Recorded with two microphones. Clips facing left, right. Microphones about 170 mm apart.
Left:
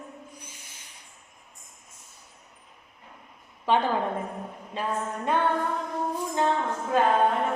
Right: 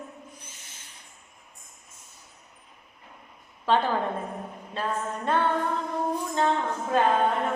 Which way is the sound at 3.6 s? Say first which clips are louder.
Even; 15° left (ahead or behind).